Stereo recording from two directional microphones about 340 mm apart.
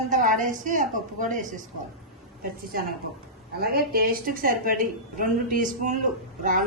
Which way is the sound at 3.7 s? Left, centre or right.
Right.